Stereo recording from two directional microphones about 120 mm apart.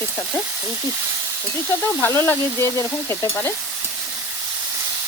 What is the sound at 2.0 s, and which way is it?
Stir, 20° left (ahead or behind).